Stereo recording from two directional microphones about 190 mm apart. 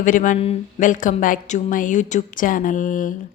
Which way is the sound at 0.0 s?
40° left (ahead or behind).